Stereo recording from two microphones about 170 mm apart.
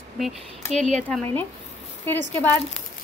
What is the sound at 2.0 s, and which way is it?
Speech, 10° left (ahead or behind).